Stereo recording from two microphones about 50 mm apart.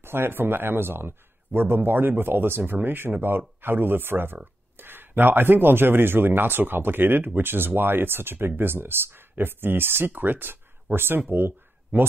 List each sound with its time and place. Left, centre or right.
0.0 s speech: right